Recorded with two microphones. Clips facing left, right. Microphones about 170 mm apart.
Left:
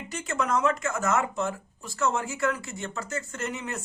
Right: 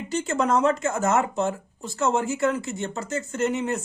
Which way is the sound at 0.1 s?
30° right (ahead or behind).